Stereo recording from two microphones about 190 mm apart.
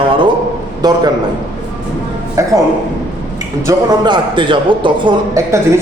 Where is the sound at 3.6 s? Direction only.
20° right (ahead or behind).